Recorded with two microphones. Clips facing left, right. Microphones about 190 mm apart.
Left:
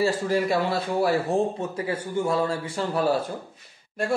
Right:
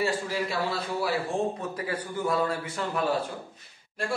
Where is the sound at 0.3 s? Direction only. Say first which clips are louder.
Left 6 dB; 50° left (ahead or behind).